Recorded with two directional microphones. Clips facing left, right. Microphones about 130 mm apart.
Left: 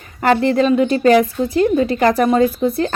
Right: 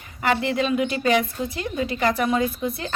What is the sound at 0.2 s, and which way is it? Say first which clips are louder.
A woman's voice: left 8 dB; 40° left (ahead or behind).